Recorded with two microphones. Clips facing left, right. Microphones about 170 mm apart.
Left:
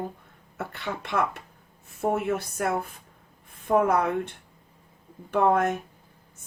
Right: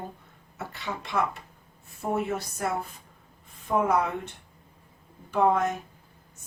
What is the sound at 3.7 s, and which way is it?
Speech, 55° left (ahead or behind).